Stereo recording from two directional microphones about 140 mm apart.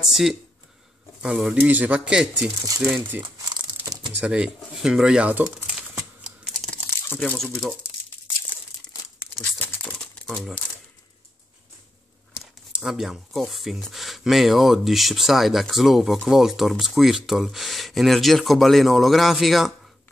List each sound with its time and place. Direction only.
0.0 s speech: 5° right (ahead or behind)
2.6 s speech: 25° right (ahead or behind)
3.2 s crumpling: 30° right (ahead or behind)
4.2 s crumpling: 5° right (ahead or behind)
7.2 s speech: 10° left (ahead or behind)
9.4 s crumpling: 10° left (ahead or behind)
12.4 s speech: 5° right (ahead or behind)